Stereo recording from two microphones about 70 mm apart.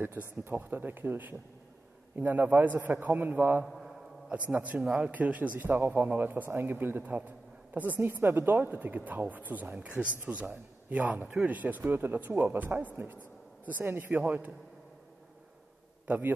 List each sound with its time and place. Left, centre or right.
0.0 s speech: right
3.6 s a man's voice: centre
4.3 s speech: right
4.7 s a man's voice: centre
5.1 s speech: right